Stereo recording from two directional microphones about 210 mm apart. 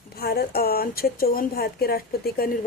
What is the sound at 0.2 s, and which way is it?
A woman's voice, 45° left (ahead or behind).